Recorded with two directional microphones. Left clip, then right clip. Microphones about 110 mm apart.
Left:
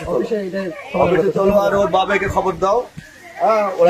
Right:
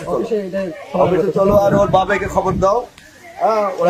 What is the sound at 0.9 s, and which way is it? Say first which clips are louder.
A man's voice: right 1 dB; 15° right (ahead or behind).